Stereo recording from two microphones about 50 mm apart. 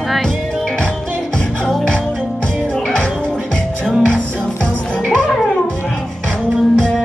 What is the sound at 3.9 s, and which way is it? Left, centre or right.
Music, centre.